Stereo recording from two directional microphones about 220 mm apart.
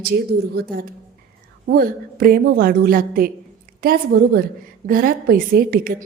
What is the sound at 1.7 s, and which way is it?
A woman's voice, 45° right (ahead or behind).